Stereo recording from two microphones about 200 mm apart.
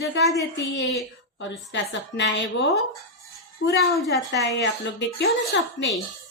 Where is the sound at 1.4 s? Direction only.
65° left (ahead or behind).